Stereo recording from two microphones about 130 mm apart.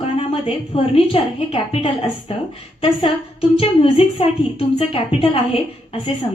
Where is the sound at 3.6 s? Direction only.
45° left (ahead or behind).